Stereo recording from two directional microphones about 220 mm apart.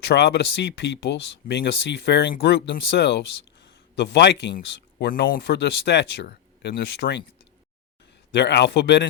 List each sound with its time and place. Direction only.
0.0 s speech: 50° left (ahead or behind)
8.3 s speech: 50° left (ahead or behind)